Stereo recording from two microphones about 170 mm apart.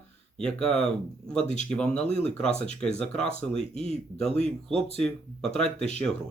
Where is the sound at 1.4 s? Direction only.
40° left (ahead or behind).